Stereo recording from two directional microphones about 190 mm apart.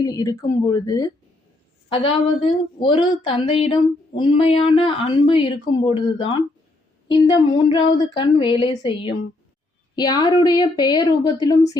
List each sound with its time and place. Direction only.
0.0 s a woman's voice: 20° left (ahead or behind)